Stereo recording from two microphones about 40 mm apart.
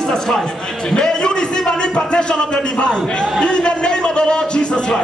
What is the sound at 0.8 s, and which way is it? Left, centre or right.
A man's voice, centre.